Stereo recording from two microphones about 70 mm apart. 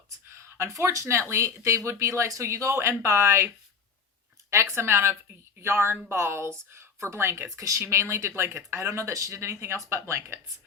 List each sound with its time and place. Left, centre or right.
0.3 s speech: right
4.5 s speech: right